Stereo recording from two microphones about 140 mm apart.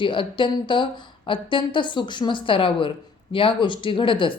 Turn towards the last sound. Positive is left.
turn(degrees=35)  # may be behind; listen again after turning